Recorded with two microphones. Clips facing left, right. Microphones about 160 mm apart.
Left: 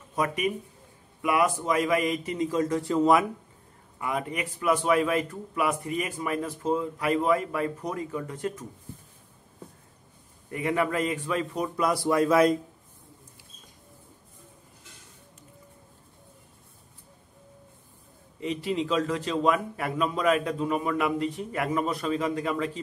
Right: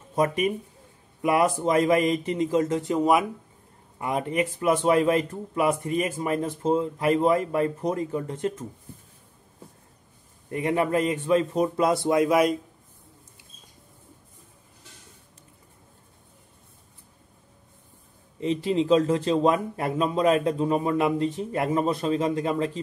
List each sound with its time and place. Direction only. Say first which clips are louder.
0.1 s a man's voice: right 4 dB; 25° right (ahead or behind)
4.0 s a man's voice: right 5 dB; 25° right (ahead or behind)
10.5 s a man's voice: right 3 dB; 30° right (ahead or behind); by 12.5 s 15° right (ahead or behind)
18.4 s a man's voice: right 5 dB; 30° right (ahead or behind)